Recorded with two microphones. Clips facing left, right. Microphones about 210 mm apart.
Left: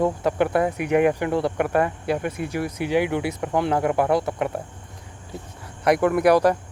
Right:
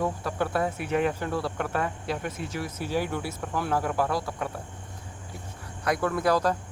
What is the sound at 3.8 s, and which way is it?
Speech, 65° left (ahead or behind).